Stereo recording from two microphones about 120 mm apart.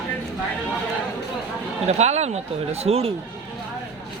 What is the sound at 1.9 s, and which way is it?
Speech, 65° right (ahead or behind).